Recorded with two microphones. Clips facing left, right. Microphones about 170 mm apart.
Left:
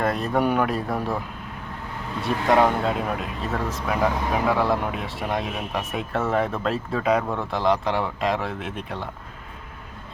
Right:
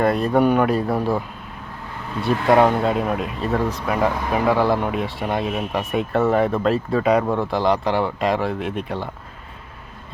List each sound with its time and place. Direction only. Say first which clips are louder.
0.0 s speech: right 5 dB; centre (ahead or behind)
0.9 s speech: right 5 dB; 30° right (ahead or behind)
2.6 s speech: right 4 dB; centre (ahead or behind)